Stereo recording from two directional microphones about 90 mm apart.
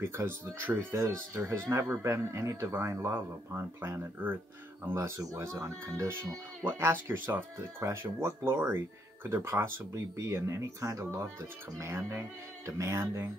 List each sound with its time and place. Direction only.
0.0 s speech: 25° right (ahead or behind)
4.9 s speech: 35° right (ahead or behind)